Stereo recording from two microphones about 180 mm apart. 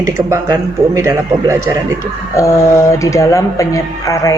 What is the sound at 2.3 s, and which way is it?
A woman's voice, 15° left (ahead or behind).